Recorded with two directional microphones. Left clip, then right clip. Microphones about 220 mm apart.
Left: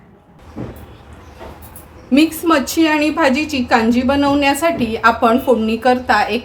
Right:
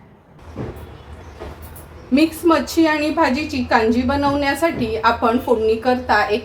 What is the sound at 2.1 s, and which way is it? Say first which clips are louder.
A woman's voice: left 2 dB; 45° left (ahead or behind).